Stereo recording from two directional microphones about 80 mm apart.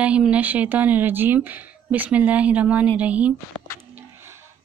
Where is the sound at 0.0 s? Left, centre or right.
Centre.